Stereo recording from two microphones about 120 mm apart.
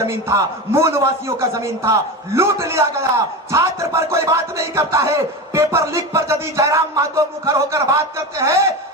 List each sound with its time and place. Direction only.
0.0 s music: 25° right (ahead or behind)